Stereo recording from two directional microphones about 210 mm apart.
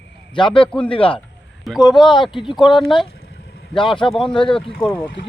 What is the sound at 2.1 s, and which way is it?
Speech, 20° left (ahead or behind).